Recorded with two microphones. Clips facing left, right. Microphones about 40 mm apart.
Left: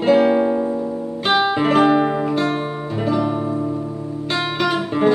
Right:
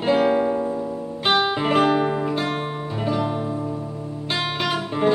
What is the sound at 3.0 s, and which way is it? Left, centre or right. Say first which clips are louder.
Music: left 4 dB; centre.